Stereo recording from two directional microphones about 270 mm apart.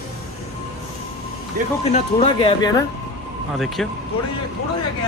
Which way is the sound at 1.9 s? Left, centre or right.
Centre.